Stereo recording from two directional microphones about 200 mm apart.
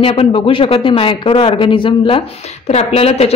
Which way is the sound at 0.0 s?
25° left (ahead or behind).